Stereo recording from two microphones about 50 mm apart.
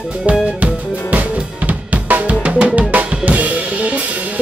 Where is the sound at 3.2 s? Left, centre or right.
Right.